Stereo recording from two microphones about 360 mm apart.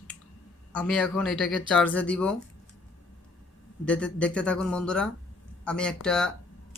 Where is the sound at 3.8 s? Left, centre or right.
Centre.